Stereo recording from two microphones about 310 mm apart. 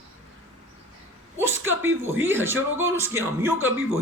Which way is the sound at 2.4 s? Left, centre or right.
Centre.